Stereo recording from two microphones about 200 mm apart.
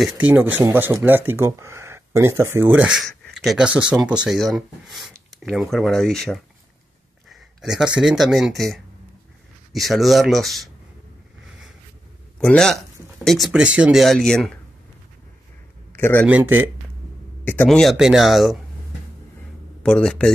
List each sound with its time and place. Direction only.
0.0 s speech: 5° right (ahead or behind)
12.4 s speech: 5° left (ahead or behind)
16.0 s speech: 10° left (ahead or behind)
16.3 s speech: 10° right (ahead or behind)
17.5 s speech: 5° left (ahead or behind)
19.8 s speech: 5° left (ahead or behind)